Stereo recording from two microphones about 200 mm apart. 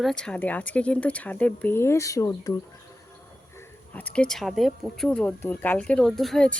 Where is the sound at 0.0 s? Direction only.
5° left (ahead or behind).